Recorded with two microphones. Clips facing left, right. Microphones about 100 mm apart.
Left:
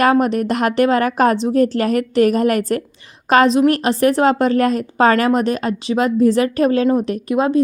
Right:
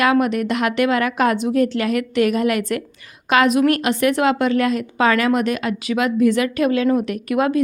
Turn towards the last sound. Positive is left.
turn(degrees=30)  # may be behind; listen again after turning